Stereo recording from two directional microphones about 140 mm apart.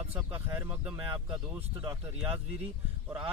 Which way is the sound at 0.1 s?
15° right (ahead or behind).